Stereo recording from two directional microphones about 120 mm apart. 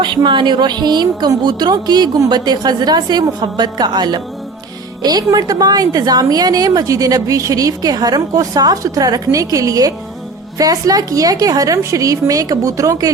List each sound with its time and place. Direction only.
0.0 s a woman's voice: 40° right (ahead or behind)